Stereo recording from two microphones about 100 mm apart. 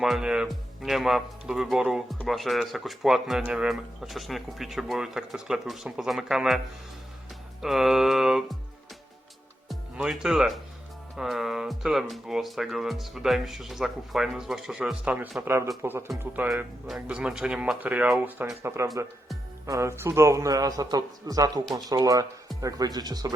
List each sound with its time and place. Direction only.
0.0 s speech: 5° right (ahead or behind)
7.6 s speech: 5° right (ahead or behind)
9.9 s speech: 5° right (ahead or behind)
15.0 s speech: 15° right (ahead or behind)
16.9 s a man's voice: 10° right (ahead or behind); by 23.3 s 40° right (ahead or behind)